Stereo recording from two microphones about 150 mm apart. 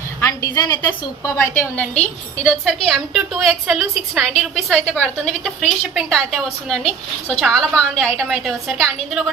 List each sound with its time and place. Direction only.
0.2 s a woman's voice: 20° left (ahead or behind); by 9.2 s centre (ahead or behind)